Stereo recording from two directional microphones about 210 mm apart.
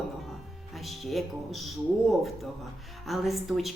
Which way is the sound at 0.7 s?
Centre (ahead or behind).